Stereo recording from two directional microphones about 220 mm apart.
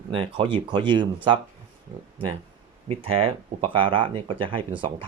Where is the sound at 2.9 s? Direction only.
25° right (ahead or behind).